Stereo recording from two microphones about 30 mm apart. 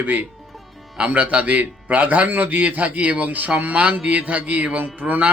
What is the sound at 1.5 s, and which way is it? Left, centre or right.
A man's voice, right.